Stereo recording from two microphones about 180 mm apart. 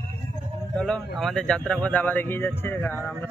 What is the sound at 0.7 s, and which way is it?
Speech, 5° left (ahead or behind).